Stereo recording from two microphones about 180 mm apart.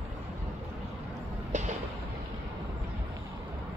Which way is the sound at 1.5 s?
40° right (ahead or behind).